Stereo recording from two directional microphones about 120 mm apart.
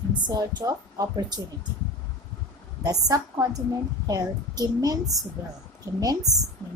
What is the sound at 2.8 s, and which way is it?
A woman's voice, 30° right (ahead or behind).